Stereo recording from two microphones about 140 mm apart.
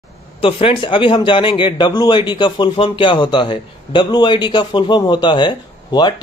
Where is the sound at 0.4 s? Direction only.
40° left (ahead or behind).